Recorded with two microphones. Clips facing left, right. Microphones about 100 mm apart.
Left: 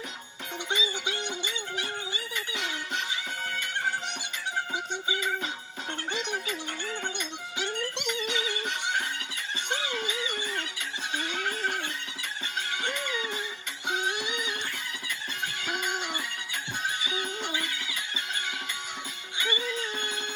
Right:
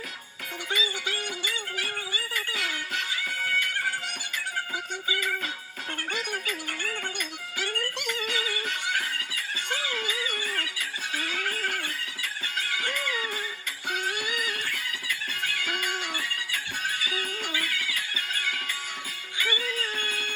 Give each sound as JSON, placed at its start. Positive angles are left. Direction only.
{"t": 0.7, "sound": "music", "side_deg": 20}
{"t": 5.0, "sound": "music", "side_deg": 20}